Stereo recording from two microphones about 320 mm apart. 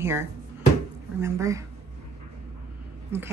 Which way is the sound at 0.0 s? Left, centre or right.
Centre.